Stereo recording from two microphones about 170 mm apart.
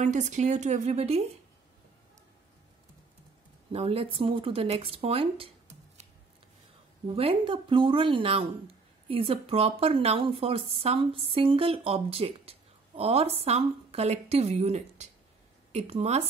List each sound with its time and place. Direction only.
0.0 s a woman's voice: 45° right (ahead or behind)
3.7 s a woman's voice: 35° right (ahead or behind)
7.2 s a woman's voice: 30° right (ahead or behind)